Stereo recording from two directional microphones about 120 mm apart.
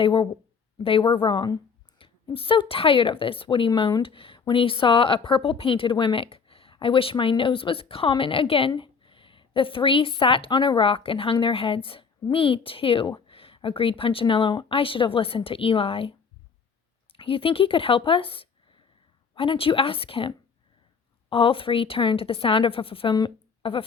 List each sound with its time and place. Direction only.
0.0 s speech: 45° left (ahead or behind)
2.0 s a sound: 50° left (ahead or behind)
2.3 s speech: 50° left (ahead or behind)